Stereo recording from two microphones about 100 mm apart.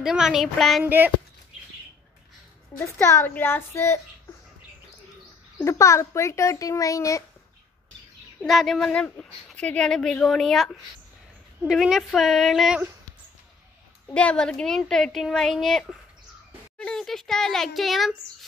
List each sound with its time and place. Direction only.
0.0 s a woman's voice: 5° right (ahead or behind)
0.8 s speech: 20° right (ahead or behind)
3.0 s speech: 30° left (ahead or behind)
5.6 s speech: 30° left (ahead or behind)
8.4 s a woman's voice: centre (ahead or behind)
14.0 s a woman's voice: 10° left (ahead or behind)